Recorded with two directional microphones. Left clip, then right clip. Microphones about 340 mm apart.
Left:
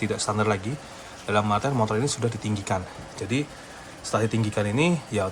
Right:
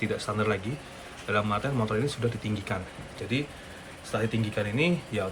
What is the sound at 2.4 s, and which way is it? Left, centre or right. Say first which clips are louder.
Speech: left 3 dB; left.